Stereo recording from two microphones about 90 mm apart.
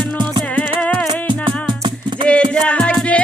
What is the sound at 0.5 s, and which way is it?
Music, 15° left (ahead or behind).